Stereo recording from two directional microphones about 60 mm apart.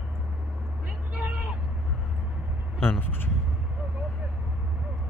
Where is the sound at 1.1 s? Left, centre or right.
Right.